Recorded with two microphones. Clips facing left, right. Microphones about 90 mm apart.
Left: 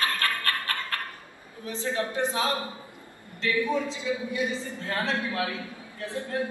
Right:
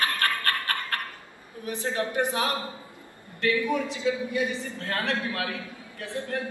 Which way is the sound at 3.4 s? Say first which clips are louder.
Right 1 dB; 60° right (ahead or behind).